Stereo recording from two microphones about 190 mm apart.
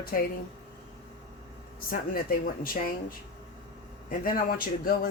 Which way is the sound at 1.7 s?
50° left (ahead or behind).